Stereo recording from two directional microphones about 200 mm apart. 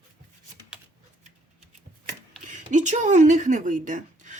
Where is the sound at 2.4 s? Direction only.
40° right (ahead or behind).